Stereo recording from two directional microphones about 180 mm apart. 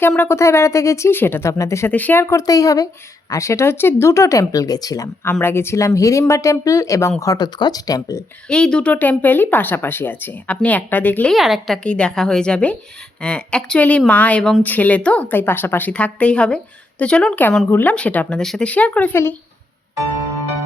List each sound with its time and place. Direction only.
0.0 s speech: 10° left (ahead or behind)
8.4 s speech: 5° left (ahead or behind)